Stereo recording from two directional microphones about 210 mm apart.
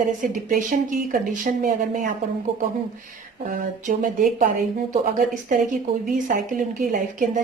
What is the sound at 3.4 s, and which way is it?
A woman's voice, 40° right (ahead or behind).